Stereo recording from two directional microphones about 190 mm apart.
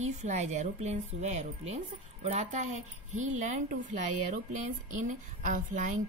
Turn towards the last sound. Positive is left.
turn(degrees=-40)  # may be behind; listen again after turning